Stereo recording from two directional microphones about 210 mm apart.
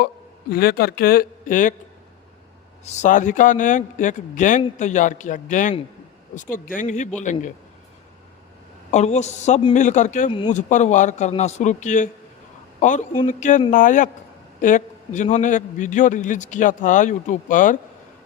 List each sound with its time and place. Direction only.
0.5 s speech: 45° left (ahead or behind)
2.8 s a man's voice: 35° left (ahead or behind)
8.9 s a man's voice: 35° left (ahead or behind)